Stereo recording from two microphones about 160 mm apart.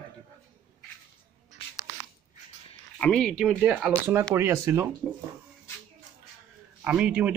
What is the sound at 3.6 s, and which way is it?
Speech, 10° right (ahead or behind).